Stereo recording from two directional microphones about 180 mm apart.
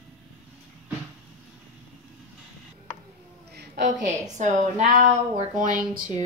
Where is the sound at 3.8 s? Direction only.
40° right (ahead or behind).